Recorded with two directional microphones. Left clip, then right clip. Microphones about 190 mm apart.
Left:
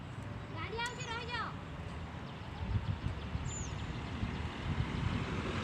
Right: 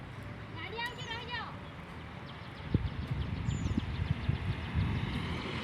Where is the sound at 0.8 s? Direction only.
30° right (ahead or behind).